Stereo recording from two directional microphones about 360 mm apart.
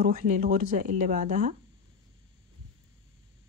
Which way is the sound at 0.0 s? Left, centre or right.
Right.